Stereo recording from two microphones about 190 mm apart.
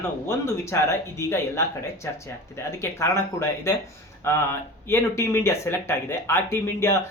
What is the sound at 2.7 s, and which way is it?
Speech, 15° left (ahead or behind).